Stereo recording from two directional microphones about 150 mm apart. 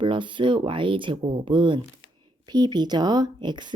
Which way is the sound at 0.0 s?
35° right (ahead or behind).